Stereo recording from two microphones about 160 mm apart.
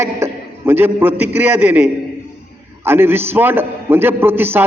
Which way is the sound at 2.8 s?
15° right (ahead or behind).